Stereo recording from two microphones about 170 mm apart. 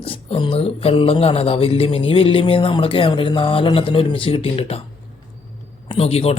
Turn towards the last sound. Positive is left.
turn(degrees=35)  # may be behind; listen again after turning